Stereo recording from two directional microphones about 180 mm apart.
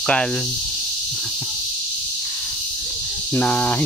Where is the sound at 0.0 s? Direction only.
5° left (ahead or behind).